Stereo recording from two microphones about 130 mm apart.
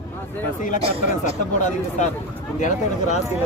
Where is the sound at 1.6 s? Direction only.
70° left (ahead or behind).